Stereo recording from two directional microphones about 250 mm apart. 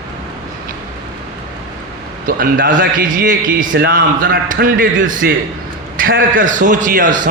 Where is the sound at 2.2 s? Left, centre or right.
Right.